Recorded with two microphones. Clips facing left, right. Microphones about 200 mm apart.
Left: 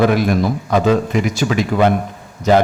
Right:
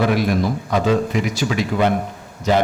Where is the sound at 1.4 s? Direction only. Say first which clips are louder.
Left 4 dB; 60° left (ahead or behind).